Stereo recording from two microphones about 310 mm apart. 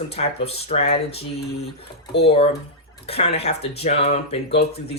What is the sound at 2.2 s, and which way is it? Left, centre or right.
Speech, centre.